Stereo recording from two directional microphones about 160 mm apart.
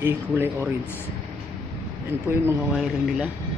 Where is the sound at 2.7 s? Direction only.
Centre (ahead or behind).